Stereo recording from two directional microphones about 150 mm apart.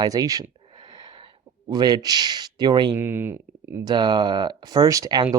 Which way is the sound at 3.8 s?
30° right (ahead or behind).